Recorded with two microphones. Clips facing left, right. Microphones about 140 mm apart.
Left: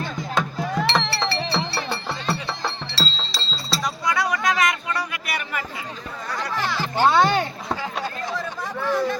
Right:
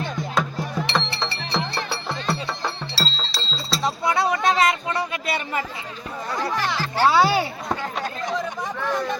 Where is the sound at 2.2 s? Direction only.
Centre (ahead or behind).